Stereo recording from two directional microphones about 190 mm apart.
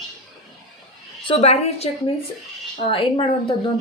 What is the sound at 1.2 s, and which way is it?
Speech, 30° left (ahead or behind).